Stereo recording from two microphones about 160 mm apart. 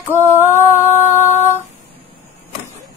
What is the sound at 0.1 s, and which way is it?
Female singing, 15° right (ahead or behind).